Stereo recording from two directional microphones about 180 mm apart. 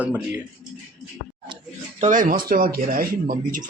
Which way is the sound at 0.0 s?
10° right (ahead or behind).